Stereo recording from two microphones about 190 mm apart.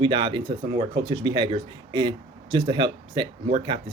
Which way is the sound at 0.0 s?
25° right (ahead or behind).